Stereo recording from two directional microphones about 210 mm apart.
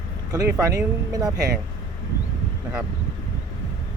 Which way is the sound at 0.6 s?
15° right (ahead or behind).